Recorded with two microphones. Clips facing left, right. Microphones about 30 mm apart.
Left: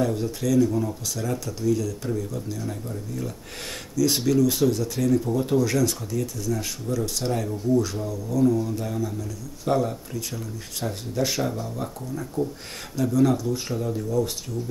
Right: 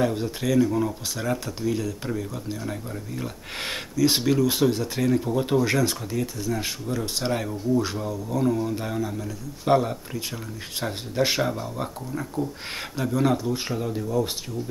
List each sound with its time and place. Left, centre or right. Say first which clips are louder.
0.0 s speech: even; right